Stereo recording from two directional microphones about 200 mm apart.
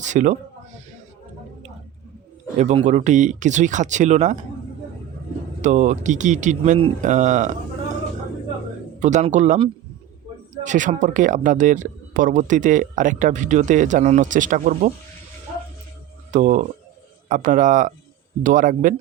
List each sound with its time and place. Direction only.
0.0 s a sound: 35° right (ahead or behind)
2.6 s speech: 35° right (ahead or behind)
5.6 s speech: 35° right (ahead or behind)
9.0 s speech: 35° right (ahead or behind)
16.3 s speech: 40° right (ahead or behind)